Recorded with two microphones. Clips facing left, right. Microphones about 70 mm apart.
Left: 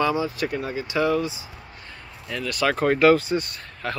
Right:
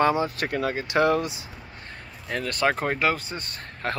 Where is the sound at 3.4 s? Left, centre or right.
Right.